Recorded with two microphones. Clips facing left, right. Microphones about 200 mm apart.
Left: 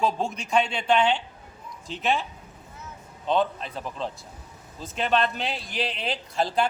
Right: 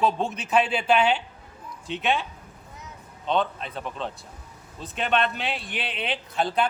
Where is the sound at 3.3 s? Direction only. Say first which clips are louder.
Left 1 dB; centre (ahead or behind).